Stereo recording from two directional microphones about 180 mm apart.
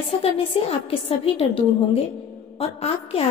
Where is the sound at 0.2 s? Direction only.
35° left (ahead or behind).